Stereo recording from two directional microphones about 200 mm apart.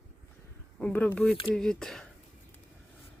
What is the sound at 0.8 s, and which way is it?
Speech, 5° left (ahead or behind).